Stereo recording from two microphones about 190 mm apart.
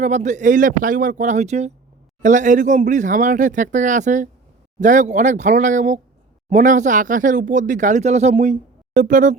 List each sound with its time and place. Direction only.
0.0 s speech: 40° right (ahead or behind)